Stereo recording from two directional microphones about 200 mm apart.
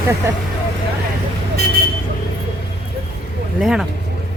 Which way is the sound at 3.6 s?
Centre (ahead or behind).